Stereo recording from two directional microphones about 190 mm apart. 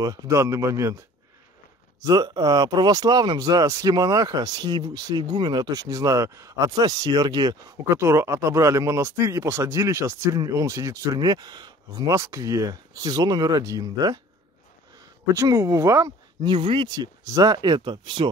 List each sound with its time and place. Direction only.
0.0 s speech: 15° right (ahead or behind)
2.0 s speech: 20° right (ahead or behind)
15.3 s speech: 15° right (ahead or behind)